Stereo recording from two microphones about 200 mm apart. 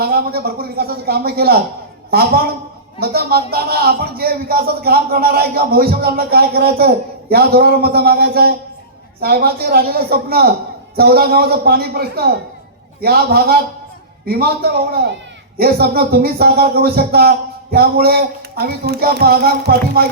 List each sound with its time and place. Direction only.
0.0 s a man's voice: 50° right (ahead or behind)